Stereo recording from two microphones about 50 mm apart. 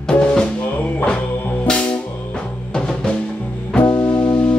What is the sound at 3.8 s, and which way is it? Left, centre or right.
Music, left.